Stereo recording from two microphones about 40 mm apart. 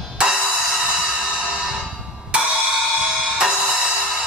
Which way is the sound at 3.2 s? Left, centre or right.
Centre.